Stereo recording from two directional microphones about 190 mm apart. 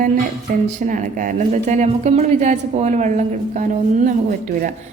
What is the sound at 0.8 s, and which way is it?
A woman's voice, 40° right (ahead or behind).